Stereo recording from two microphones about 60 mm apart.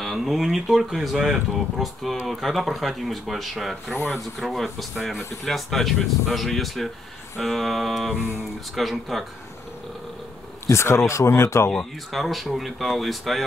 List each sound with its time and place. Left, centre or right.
0.0 s speech: centre
10.7 s speech: left
11.7 s speech: centre